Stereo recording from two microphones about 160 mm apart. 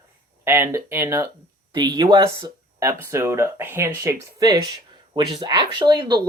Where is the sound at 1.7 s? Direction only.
25° right (ahead or behind).